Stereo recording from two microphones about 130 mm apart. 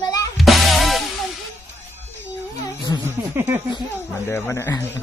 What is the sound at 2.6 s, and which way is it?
Speech, 35° left (ahead or behind).